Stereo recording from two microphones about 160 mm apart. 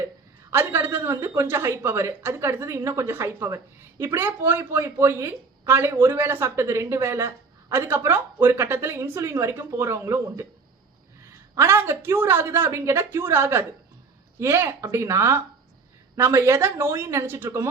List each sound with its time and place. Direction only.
0.5 s speech: 15° right (ahead or behind)
11.5 s speech: 15° right (ahead or behind)